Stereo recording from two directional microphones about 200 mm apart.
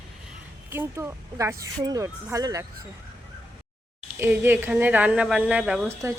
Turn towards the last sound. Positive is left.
turn(degrees=-5)  # may be behind; listen again after turning